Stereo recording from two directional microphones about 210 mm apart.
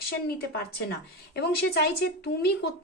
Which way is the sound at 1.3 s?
50° left (ahead or behind).